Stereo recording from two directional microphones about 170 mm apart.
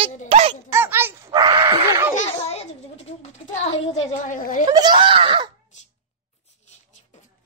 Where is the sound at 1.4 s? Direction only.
25° right (ahead or behind).